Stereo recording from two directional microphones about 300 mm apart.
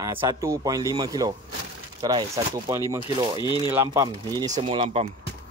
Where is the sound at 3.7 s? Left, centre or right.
Centre.